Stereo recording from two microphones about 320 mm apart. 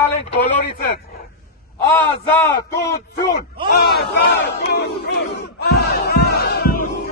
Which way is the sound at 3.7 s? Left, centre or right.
Left.